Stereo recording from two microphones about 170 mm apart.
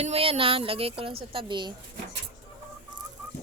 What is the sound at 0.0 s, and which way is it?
Speech, 35° right (ahead or behind).